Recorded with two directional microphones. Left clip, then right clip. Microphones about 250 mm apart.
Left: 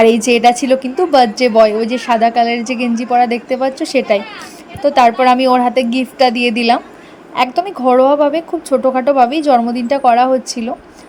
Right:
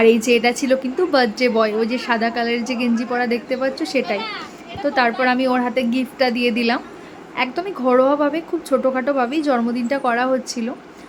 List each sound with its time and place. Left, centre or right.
0.0 s a woman's voice: centre